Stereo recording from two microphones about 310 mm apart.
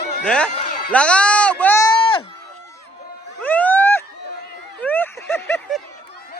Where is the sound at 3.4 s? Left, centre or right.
Centre.